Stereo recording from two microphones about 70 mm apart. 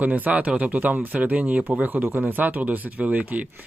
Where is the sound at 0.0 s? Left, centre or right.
Right.